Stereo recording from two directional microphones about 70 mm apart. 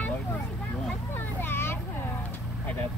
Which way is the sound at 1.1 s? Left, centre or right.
Left.